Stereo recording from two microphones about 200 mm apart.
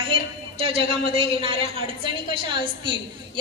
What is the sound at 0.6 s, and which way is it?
Speech, 30° right (ahead or behind).